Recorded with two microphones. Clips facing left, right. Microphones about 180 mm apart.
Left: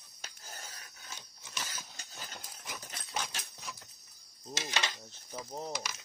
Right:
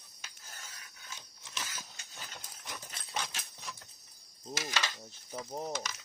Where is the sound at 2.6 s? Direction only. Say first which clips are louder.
Even; centre (ahead or behind).